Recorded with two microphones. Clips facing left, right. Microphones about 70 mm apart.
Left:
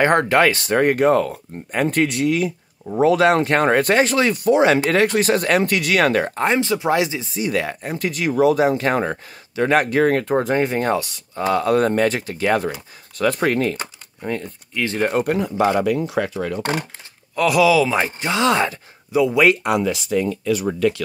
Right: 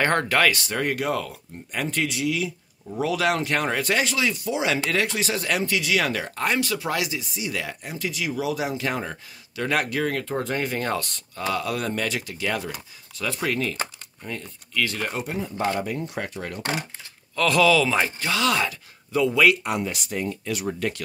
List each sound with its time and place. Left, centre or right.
0.0 s speech: left
0.6 s speech: left
6.3 s speech: left
7.3 s speech: left
9.6 s speech: left
11.0 s speech: centre
11.3 s speech: left
14.7 s speech: left
15.0 s speech: left
15.2 s speech: left
17.4 s speech: centre; by 18.8 s left
19.1 s speech: centre
19.6 s speech: left